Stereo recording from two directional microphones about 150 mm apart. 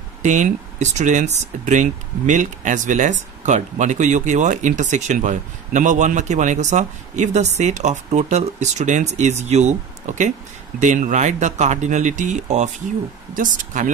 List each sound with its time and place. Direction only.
0.2 s speech: 55° right (ahead or behind)